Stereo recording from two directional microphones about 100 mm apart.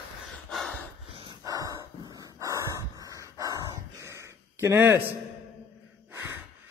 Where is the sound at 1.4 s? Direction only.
35° right (ahead or behind).